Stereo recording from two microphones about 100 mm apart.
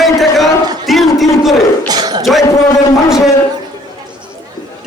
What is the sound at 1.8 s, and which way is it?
Speech, 45° right (ahead or behind).